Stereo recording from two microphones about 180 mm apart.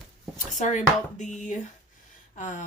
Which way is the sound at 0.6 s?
40° left (ahead or behind).